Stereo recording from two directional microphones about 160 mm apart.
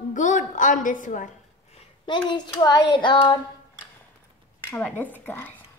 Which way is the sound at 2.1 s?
30° left (ahead or behind).